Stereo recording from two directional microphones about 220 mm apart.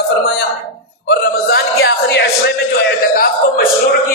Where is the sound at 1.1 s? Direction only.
45° left (ahead or behind).